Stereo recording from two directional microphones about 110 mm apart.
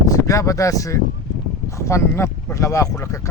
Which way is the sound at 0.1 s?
30° left (ahead or behind).